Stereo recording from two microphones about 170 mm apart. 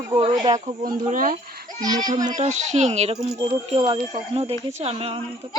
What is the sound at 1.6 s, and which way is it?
Children playing, 20° right (ahead or behind).